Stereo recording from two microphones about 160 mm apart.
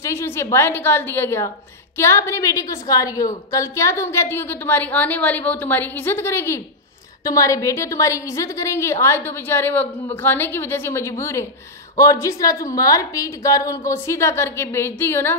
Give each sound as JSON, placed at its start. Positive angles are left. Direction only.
{"t": 0.0, "sound": "a woman's voice", "side_deg": 15}